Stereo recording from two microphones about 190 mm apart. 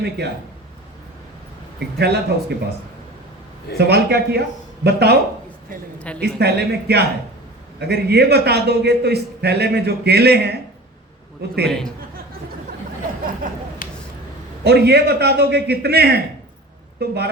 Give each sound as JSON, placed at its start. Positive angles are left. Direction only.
{"t": 2.0, "sound": "a man's voice", "side_deg": -60}
{"t": 3.8, "sound": "a man's voice", "side_deg": -55}
{"t": 6.1, "sound": "a man's voice", "side_deg": -60}
{"t": 11.6, "sound": "a man's voice", "side_deg": 5}
{"t": 13.8, "sound": "a sound", "side_deg": 45}
{"t": 14.6, "sound": "a man's voice", "side_deg": -60}